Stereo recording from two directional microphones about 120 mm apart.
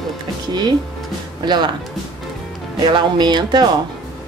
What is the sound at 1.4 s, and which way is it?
Speech, 40° right (ahead or behind).